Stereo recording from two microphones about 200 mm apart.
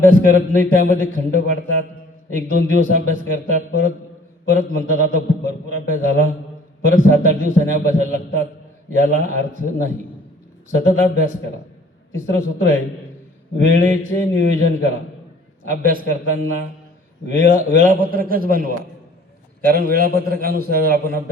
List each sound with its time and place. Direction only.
0.0 s a man's voice: 45° right (ahead or behind)
17.2 s a man's voice: 40° right (ahead or behind)